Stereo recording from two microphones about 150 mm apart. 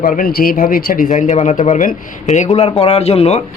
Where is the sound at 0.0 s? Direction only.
70° left (ahead or behind); by 3.4 s 45° left (ahead or behind).